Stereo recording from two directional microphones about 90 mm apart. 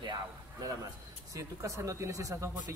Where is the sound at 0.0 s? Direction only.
55° right (ahead or behind).